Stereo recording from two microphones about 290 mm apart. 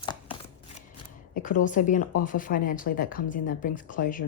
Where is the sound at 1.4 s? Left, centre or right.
Left.